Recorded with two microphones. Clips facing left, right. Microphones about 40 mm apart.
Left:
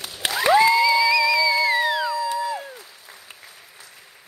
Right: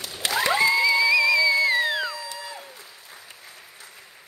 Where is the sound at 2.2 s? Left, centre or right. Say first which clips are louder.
Left 12 dB; left.